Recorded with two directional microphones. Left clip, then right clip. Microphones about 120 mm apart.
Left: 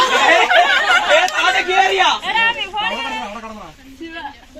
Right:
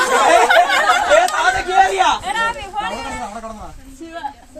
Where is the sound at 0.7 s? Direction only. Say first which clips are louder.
Even; 65° right (ahead or behind).